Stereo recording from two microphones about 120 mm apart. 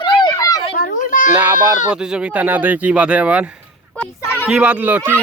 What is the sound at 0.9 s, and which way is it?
Children playing, 90° left.